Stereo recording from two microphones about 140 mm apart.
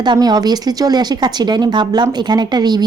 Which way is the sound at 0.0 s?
30° right (ahead or behind).